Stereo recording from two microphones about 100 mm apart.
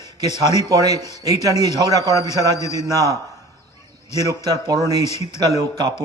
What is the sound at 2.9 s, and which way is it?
Speech, 35° right (ahead or behind).